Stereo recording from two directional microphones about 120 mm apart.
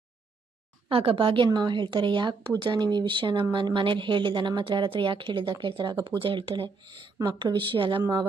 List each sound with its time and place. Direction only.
0.9 s a woman's voice: 50° right (ahead or behind)